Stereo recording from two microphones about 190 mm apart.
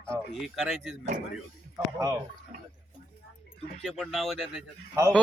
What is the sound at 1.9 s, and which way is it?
Speech, 15° right (ahead or behind).